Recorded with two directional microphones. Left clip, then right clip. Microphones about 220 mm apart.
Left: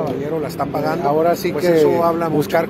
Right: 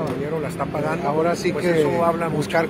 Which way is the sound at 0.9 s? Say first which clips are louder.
Left 5 dB; 50° left (ahead or behind).